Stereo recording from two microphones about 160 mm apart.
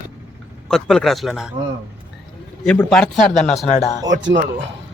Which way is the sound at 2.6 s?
5° left (ahead or behind).